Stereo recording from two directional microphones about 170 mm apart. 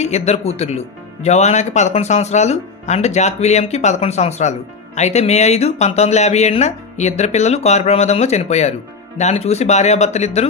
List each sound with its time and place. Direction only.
0.0 s speech: 40° left (ahead or behind)